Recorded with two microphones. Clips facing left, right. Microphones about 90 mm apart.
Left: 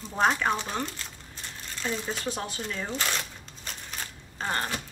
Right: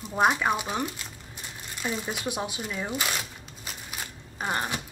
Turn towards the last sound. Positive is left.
turn(degrees=-15)  # may be behind; listen again after turning